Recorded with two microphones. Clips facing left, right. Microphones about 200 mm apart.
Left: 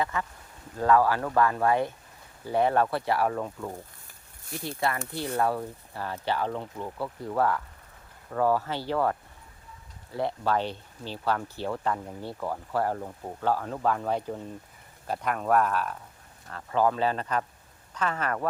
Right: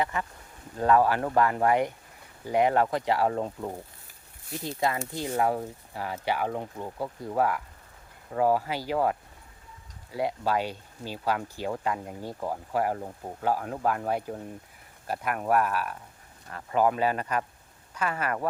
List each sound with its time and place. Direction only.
0.0 s speech: 20° right (ahead or behind)
3.3 s speech: 25° right (ahead or behind)
4.8 s speech: 20° right (ahead or behind)